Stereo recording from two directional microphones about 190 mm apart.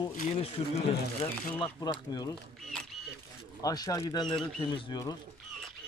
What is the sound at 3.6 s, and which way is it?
Speech, 20° left (ahead or behind).